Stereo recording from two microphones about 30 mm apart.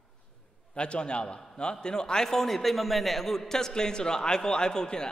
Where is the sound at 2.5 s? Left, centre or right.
Centre; by 5.1 s left.